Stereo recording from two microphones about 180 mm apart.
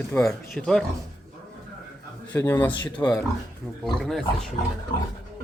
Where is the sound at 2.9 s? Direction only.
25° left (ahead or behind).